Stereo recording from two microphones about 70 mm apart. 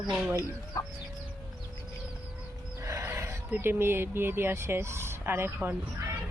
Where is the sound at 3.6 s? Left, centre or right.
Right.